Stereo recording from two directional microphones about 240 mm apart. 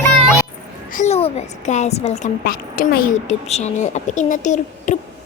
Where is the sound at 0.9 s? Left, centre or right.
Left.